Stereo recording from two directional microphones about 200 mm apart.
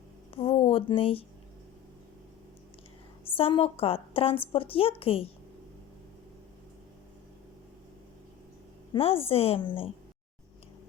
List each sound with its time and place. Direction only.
0.3 s a sound: 25° left (ahead or behind)
3.2 s a woman's voice: 25° left (ahead or behind)
8.9 s a woman's voice: 30° left (ahead or behind)